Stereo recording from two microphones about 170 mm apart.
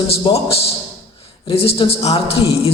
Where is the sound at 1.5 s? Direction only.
30° left (ahead or behind).